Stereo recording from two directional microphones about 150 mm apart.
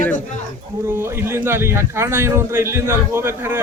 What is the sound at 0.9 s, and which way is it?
A man's voice, 15° right (ahead or behind).